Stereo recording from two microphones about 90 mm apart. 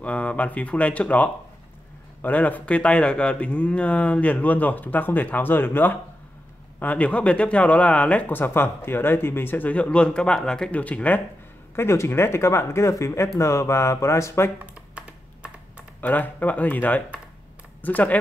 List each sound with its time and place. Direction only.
0.0 s speech: 15° left (ahead or behind)
11.7 s speech: 30° left (ahead or behind)
15.0 s computer keyboard: 15° right (ahead or behind)
16.0 s speech: 20° left (ahead or behind)